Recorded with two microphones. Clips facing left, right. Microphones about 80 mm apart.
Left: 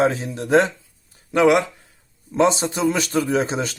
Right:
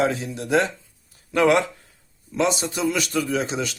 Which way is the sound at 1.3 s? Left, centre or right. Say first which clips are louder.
Left 2 dB; centre.